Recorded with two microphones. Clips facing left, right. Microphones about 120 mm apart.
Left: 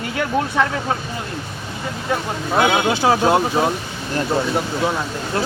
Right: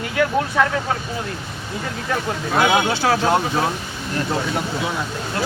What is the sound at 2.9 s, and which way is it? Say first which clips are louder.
Speech: left 2 dB; 15° left (ahead or behind).